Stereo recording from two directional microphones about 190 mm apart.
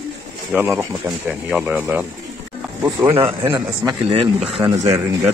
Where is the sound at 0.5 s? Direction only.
10° right (ahead or behind).